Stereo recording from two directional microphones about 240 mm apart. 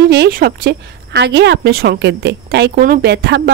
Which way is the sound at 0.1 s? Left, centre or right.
Right.